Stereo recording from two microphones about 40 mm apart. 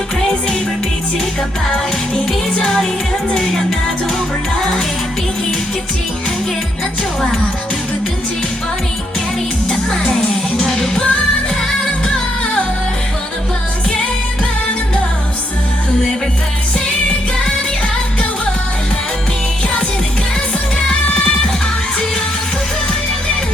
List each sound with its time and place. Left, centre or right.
1.7 s music: centre
9.6 s music: centre
20.9 s music: left